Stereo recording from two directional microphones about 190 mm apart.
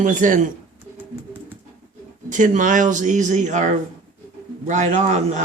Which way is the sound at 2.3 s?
45° right (ahead or behind).